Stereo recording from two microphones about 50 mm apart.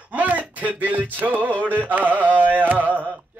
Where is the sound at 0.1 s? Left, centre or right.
Right.